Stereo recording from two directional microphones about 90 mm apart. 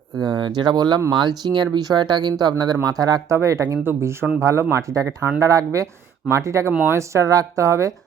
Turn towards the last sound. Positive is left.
turn(degrees=-35)  # may be behind; listen again after turning